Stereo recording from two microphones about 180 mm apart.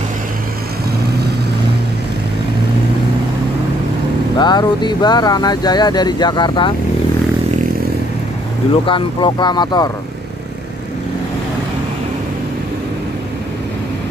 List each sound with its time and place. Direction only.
4.4 s speech: 25° left (ahead or behind)
8.8 s speech: 25° left (ahead or behind)